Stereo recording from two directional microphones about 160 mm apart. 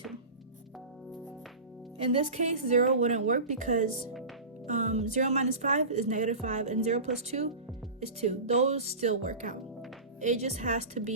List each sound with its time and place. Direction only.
2.0 s speech: 40° right (ahead or behind)